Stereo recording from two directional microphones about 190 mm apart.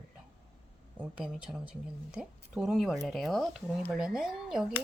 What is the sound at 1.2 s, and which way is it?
Speech, centre (ahead or behind).